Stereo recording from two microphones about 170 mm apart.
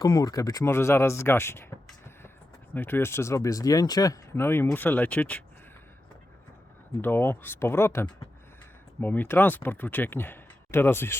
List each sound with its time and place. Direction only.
0.0 s speech: 20° left (ahead or behind)
2.7 s speech: 10° left (ahead or behind)
7.0 s speech: 10° left (ahead or behind)